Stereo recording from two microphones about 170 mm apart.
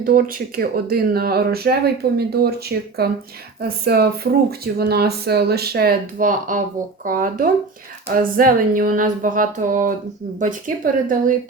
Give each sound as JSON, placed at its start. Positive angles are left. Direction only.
{"t": 0.0, "sound": "speech", "side_deg": -55}
{"t": 11.0, "sound": "speech", "side_deg": -55}